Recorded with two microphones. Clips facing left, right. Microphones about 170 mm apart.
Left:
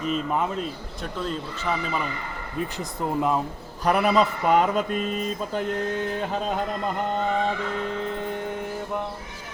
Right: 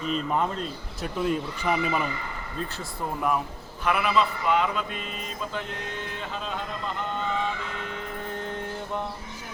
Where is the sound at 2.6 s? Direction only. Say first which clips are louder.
Left 5 dB; 20° left (ahead or behind).